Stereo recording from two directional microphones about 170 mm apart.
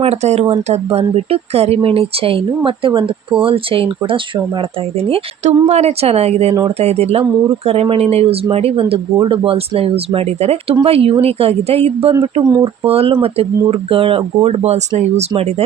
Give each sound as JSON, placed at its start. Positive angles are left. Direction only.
{"t": 0.0, "sound": "speech", "side_deg": -40}